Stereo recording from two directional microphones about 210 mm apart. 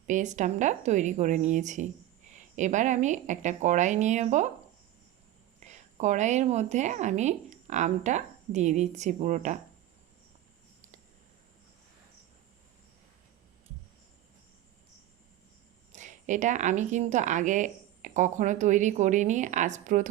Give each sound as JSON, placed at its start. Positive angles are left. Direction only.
{"t": 0.1, "sound": "speech", "side_deg": -35}
{"t": 5.6, "sound": "speech", "side_deg": -35}
{"t": 15.9, "sound": "speech", "side_deg": -35}